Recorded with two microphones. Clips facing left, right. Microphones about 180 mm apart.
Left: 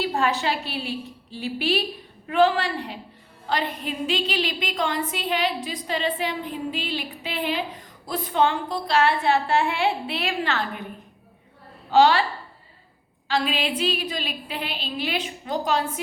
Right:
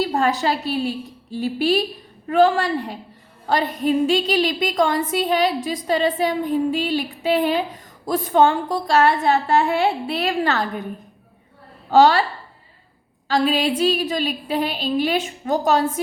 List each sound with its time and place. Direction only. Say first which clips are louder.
0.0 s a woman's voice: right 4 dB; 40° right (ahead or behind)
11.9 s a woman's voice: right 3 dB; 45° right (ahead or behind)
13.2 s a woman's voice: right 6 dB; 40° right (ahead or behind)